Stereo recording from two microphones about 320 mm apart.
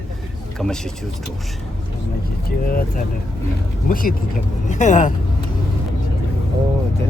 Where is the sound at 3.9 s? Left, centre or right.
Left.